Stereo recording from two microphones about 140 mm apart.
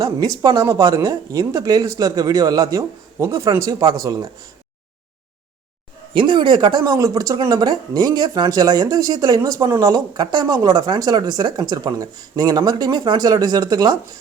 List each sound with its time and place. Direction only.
0.0 s speech: 25° right (ahead or behind)
6.1 s speech: 35° right (ahead or behind)